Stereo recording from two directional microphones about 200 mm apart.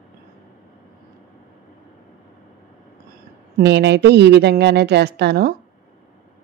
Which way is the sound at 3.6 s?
60° right (ahead or behind).